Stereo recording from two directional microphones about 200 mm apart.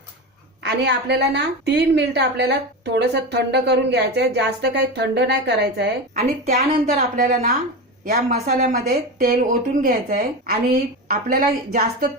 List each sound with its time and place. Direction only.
0.6 s a woman's voice: 55° right (ahead or behind)
6.1 s a woman's voice: 35° right (ahead or behind)